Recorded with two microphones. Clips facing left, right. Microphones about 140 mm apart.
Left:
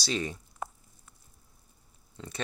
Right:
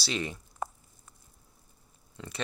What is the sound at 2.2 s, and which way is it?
Speech, 35° left (ahead or behind).